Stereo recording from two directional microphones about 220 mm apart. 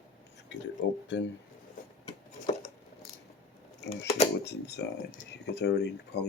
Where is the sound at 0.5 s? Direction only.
50° left (ahead or behind).